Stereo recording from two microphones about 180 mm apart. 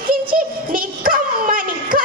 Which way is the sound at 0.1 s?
50° right (ahead or behind).